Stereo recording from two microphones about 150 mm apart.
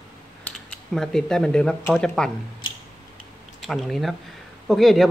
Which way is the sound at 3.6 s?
Centre (ahead or behind).